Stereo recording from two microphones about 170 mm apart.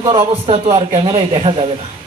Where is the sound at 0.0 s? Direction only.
30° right (ahead or behind).